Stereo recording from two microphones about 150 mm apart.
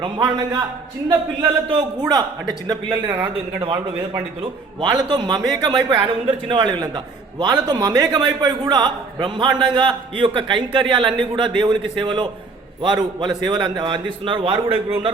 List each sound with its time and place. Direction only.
0.0 s a man's voice: 25° right (ahead or behind)
3.6 s a man's voice: 30° right (ahead or behind)